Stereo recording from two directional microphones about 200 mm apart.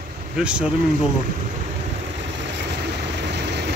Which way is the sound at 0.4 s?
5° right (ahead or behind).